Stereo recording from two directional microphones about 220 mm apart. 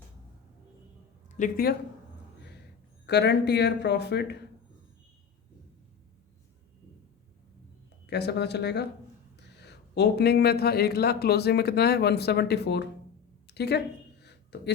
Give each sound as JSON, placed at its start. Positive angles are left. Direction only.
{"t": 1.4, "sound": "speech", "side_deg": 40}
{"t": 3.1, "sound": "speech", "side_deg": 50}
{"t": 8.0, "sound": "speech", "side_deg": 50}
{"t": 13.5, "sound": "a sound", "side_deg": 50}